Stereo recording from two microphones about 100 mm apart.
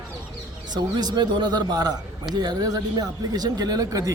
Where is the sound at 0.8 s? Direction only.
45° right (ahead or behind).